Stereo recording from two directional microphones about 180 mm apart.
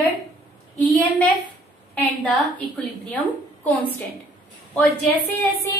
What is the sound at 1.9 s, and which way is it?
A woman's voice, 10° left (ahead or behind).